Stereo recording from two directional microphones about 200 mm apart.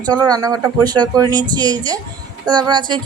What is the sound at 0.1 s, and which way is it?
Speech, 20° right (ahead or behind).